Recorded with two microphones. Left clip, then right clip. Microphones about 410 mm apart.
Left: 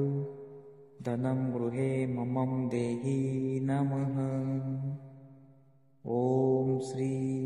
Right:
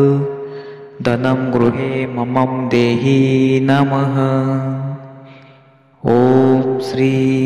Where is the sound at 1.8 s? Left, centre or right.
Right.